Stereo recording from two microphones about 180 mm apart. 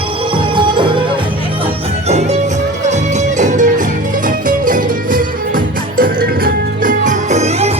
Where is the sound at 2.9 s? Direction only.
40° right (ahead or behind).